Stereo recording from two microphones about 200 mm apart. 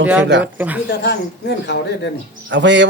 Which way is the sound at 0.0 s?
5° right (ahead or behind).